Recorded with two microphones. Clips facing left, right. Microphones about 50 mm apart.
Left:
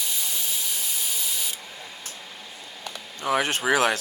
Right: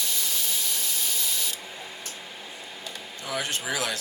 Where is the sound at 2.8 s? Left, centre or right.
Left.